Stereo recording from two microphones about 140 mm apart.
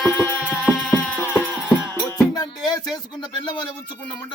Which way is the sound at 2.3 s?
30° left (ahead or behind).